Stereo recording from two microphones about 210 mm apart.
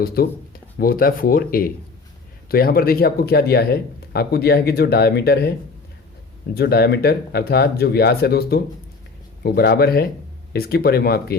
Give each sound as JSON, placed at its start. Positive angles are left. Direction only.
{"t": 0.0, "sound": "speech", "side_deg": 45}